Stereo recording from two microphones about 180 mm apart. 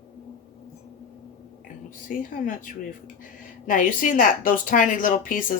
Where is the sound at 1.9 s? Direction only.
50° left (ahead or behind).